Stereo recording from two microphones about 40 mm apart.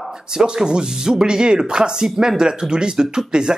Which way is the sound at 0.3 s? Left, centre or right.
Centre.